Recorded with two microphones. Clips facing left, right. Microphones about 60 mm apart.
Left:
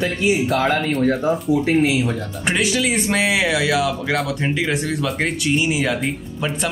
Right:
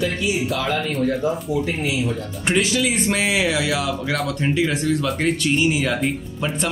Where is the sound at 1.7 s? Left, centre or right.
Left.